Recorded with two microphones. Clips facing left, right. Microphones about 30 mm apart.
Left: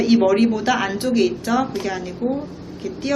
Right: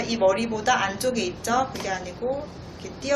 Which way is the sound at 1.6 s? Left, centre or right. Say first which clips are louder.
Left 5 dB; centre.